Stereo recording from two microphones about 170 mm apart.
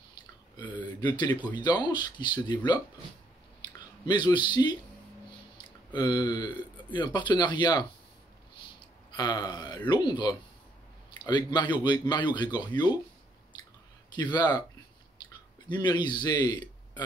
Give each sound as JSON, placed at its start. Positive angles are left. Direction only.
{"t": 0.7, "sound": "speech", "side_deg": 25}
{"t": 3.6, "sound": "chewing", "side_deg": 25}
{"t": 4.0, "sound": "speech", "side_deg": 25}
{"t": 5.9, "sound": "speech", "side_deg": 25}
{"t": 9.1, "sound": "speech", "side_deg": 25}
{"t": 14.1, "sound": "speech", "side_deg": 25}
{"t": 15.7, "sound": "a man's voice", "side_deg": 25}